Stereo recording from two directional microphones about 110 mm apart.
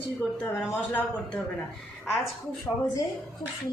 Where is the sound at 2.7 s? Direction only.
10° right (ahead or behind).